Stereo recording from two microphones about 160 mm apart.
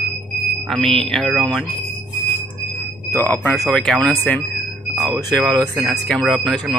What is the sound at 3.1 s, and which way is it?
Speech, 15° left (ahead or behind).